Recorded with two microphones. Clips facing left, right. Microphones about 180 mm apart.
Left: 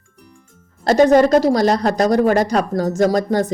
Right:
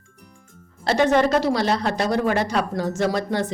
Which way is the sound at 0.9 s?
40° left (ahead or behind).